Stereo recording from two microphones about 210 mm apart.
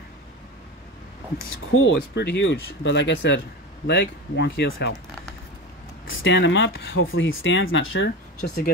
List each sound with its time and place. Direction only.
1.7 s speech: 60° left (ahead or behind)
6.0 s speech: 60° left (ahead or behind)